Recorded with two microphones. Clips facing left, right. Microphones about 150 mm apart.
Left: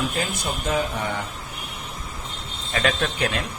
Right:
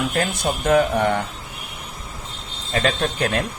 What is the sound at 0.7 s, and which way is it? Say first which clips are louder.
Speech: right 9 dB; 60° right (ahead or behind).